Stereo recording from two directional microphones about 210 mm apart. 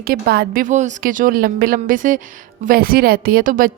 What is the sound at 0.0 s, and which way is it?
A woman's voice, 45° right (ahead or behind).